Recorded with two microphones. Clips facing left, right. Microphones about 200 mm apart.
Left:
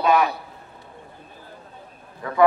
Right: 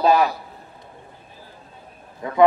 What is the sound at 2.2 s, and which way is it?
Speech, 20° right (ahead or behind).